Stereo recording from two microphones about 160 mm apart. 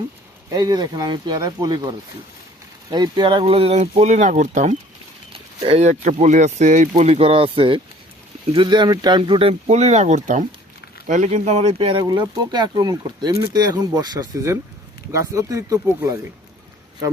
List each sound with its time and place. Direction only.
0.5 s speech: 25° right (ahead or behind)